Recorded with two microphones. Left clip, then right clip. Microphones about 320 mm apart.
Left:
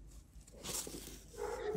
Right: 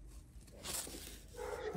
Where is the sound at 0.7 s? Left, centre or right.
Left.